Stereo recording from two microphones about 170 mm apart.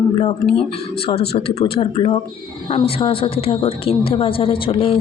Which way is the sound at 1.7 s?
30° left (ahead or behind).